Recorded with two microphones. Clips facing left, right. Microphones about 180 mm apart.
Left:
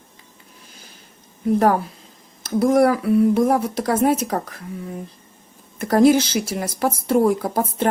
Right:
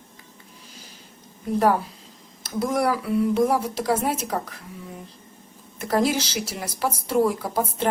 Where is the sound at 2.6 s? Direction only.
50° left (ahead or behind).